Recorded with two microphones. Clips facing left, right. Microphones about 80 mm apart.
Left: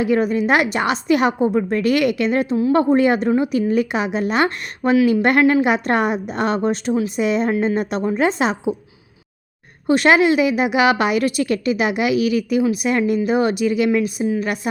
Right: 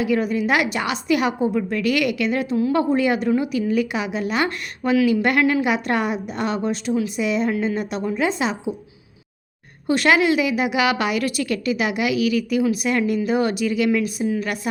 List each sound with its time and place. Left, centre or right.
0.0 s a woman's voice: left
9.8 s a woman's voice: left